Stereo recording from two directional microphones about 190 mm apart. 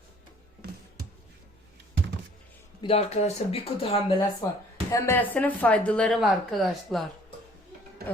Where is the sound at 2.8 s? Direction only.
30° left (ahead or behind).